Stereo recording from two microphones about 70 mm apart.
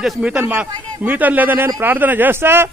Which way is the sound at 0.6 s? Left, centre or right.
Right.